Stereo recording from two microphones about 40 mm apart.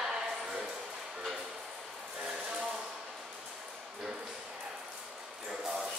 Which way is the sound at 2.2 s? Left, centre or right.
Right.